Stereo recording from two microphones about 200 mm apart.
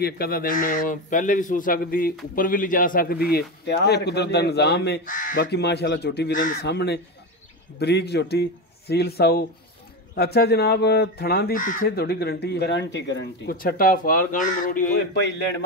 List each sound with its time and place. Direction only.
0.0 s a man's voice: 50° left (ahead or behind)
13.6 s a man's voice: 45° left (ahead or behind)